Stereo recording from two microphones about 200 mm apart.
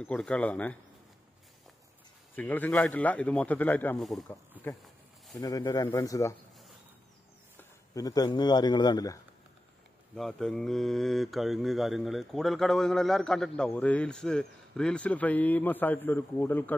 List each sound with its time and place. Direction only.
0.0 s a man's voice: 5° left (ahead or behind)
2.3 s a man's voice: 10° left (ahead or behind)
4.3 s a man's voice: 10° left (ahead or behind)
7.5 s speech: 15° left (ahead or behind)
10.1 s mantra: centre (ahead or behind)